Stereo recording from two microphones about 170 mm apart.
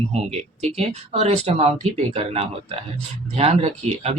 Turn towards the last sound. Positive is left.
turn(degrees=-40)  # may be behind; listen again after turning